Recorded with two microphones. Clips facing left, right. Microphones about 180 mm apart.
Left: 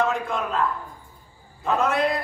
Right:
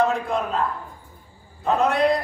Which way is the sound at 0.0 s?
35° right (ahead or behind).